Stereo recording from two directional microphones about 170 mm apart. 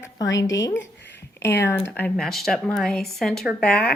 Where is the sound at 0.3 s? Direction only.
20° left (ahead or behind).